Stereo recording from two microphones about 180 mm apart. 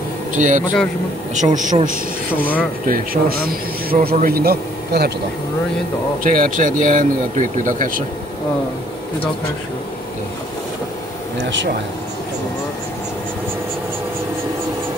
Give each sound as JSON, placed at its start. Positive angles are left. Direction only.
{"t": 0.3, "sound": "a man's voice", "side_deg": -45}
{"t": 6.2, "sound": "speech", "side_deg": -50}